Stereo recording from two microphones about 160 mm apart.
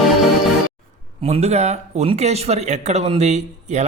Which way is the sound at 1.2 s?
40° right (ahead or behind).